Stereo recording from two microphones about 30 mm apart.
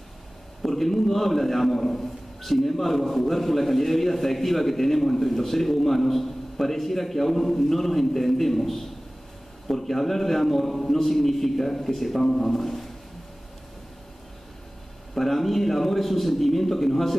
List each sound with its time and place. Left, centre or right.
0.7 s a man's voice: centre
15.1 s a man's voice: centre